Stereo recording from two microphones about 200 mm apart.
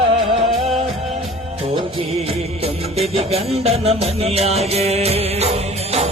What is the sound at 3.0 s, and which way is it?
Music, 30° right (ahead or behind).